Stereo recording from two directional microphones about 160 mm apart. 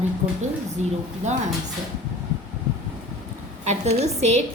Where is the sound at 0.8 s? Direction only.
45° right (ahead or behind).